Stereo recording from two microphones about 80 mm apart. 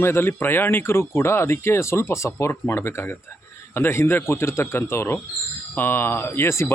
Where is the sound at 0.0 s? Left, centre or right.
Left.